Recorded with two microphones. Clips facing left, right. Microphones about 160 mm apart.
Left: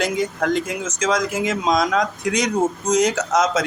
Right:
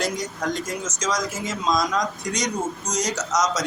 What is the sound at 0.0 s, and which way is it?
Speech, 60° left (ahead or behind).